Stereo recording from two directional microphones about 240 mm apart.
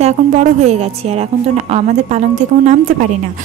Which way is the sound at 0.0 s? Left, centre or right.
Right.